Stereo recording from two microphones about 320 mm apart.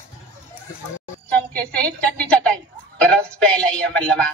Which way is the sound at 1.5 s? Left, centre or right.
Centre.